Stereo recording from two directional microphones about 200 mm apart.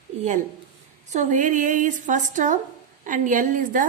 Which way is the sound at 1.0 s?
35° right (ahead or behind).